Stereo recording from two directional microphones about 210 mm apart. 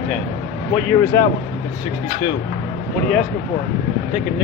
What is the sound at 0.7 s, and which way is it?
Speech, 15° left (ahead or behind).